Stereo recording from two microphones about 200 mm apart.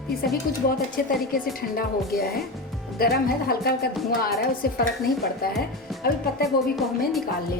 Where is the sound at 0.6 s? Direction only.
45° left (ahead or behind).